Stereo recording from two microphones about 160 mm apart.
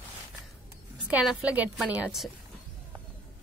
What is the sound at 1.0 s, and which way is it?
A woman's voice, 5° right (ahead or behind).